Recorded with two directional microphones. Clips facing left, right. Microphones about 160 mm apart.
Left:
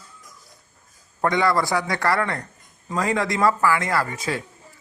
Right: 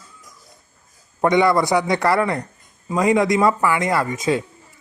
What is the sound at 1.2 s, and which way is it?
A man's voice, 20° right (ahead or behind).